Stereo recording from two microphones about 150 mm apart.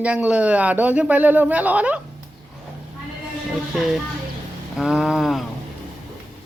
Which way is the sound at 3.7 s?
5° right (ahead or behind).